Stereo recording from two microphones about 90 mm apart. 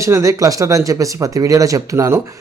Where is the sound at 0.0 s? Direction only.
35° right (ahead or behind).